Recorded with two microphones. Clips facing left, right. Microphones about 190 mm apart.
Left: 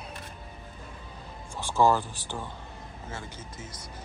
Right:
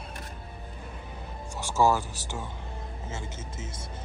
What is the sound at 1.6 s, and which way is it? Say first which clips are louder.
Speech: left 1 dB; 10° right (ahead or behind).